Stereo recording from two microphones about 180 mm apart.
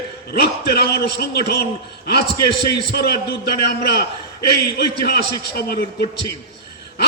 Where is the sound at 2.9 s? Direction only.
60° left (ahead or behind).